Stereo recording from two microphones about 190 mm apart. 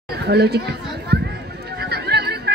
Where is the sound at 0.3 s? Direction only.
60° right (ahead or behind).